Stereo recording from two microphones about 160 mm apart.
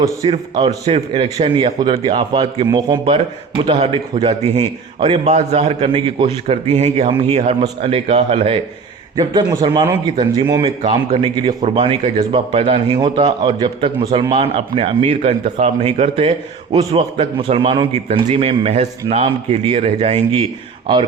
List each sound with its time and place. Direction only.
0.3 s a man's voice: 40° right (ahead or behind)
9.1 s a man's voice: 25° right (ahead or behind)